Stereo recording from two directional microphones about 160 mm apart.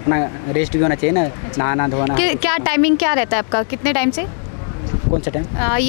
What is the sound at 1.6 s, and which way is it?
Speech, 15° left (ahead or behind).